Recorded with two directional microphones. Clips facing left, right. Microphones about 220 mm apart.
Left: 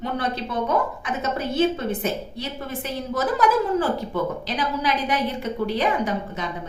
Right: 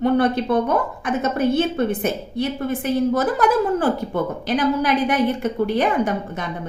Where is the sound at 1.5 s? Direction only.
55° right (ahead or behind).